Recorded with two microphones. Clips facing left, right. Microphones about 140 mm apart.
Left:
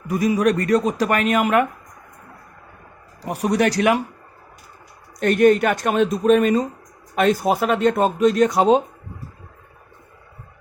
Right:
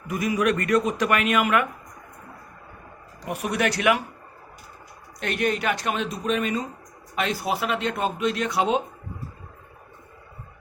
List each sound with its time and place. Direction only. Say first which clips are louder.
0.1 s speech: left 5 dB; 35° left (ahead or behind)
3.2 s speech: left 6 dB; 35° left (ahead or behind)
5.2 s speech: left 10 dB; 45° left (ahead or behind)